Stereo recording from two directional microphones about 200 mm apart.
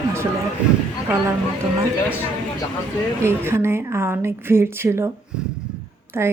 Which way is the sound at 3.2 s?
10° right (ahead or behind).